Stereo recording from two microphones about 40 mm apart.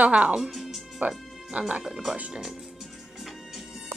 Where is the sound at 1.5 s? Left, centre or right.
Right.